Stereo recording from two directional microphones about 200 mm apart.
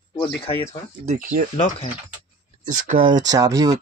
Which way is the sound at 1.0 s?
40° right (ahead or behind).